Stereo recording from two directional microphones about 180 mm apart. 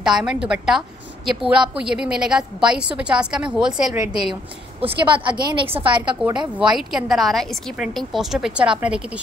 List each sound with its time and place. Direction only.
0.0 s a woman's voice: 5° right (ahead or behind)
4.8 s a woman's voice: 25° right (ahead or behind)
6.3 s a woman's voice: 5° right (ahead or behind)